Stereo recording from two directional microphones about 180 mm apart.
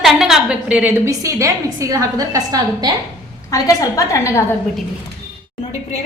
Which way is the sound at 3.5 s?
20° left (ahead or behind).